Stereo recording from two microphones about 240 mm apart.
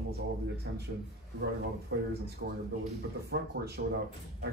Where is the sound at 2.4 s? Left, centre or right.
Right.